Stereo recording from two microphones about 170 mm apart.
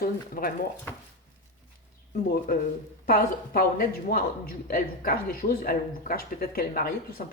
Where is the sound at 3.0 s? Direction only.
60° left (ahead or behind).